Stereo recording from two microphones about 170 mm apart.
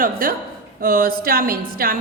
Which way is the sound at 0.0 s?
55° right (ahead or behind).